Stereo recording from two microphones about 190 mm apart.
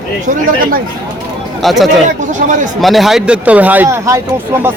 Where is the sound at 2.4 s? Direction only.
45° right (ahead or behind).